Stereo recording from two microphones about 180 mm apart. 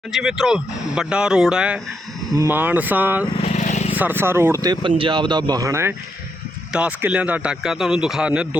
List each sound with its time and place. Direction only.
0.1 s speech: 5° right (ahead or behind)
3.3 s vehicle: 40° left (ahead or behind)
3.9 s speech: 10° right (ahead or behind)